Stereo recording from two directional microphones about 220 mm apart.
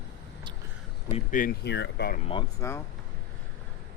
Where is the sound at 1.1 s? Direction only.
40° left (ahead or behind).